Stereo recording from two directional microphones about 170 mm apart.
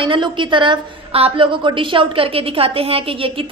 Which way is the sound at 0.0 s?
30° right (ahead or behind).